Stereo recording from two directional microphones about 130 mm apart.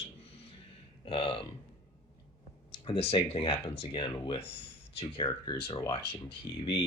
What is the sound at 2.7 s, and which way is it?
Speech, 45° left (ahead or behind).